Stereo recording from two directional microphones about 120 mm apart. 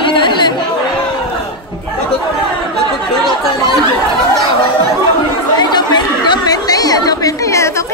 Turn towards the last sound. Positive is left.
turn(degrees=25)  # may be behind; listen again after turning